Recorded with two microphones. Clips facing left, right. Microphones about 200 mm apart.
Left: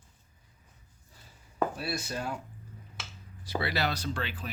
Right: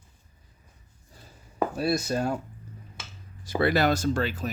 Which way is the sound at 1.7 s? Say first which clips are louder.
Right 9 dB; 40° right (ahead or behind).